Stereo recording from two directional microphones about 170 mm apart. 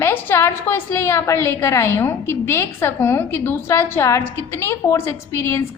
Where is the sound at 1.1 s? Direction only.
15° left (ahead or behind).